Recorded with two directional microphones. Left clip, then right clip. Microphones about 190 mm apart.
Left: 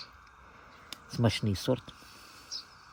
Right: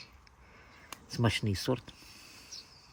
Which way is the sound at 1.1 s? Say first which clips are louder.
Left 1 dB; 55° left (ahead or behind).